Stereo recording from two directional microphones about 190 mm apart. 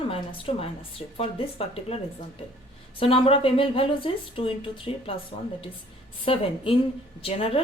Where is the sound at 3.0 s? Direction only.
30° left (ahead or behind).